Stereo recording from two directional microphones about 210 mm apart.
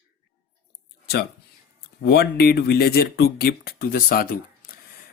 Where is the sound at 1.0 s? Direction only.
50° left (ahead or behind).